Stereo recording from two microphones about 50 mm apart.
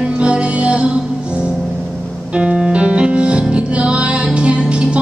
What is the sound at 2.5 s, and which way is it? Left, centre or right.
Music, centre.